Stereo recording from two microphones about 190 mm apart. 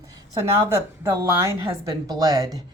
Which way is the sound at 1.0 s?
15° right (ahead or behind).